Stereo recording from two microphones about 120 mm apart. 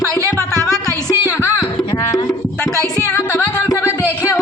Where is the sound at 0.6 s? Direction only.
25° left (ahead or behind).